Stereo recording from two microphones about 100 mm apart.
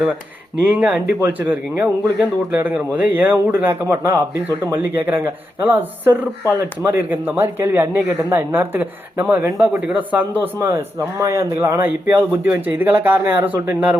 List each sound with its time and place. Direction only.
0.6 s a man's voice: 15° right (ahead or behind)